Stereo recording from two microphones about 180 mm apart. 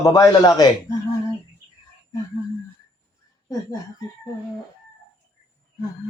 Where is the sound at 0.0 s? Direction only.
20° left (ahead or behind).